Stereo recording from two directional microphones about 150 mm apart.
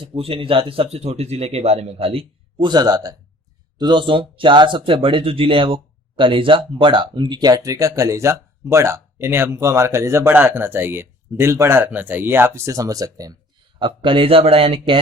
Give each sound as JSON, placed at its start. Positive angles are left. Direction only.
{"t": 0.2, "sound": "speech", "side_deg": -40}
{"t": 13.7, "sound": "speech", "side_deg": -35}